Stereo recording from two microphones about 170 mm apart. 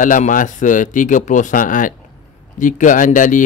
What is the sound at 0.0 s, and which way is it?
Speech, 50° left (ahead or behind).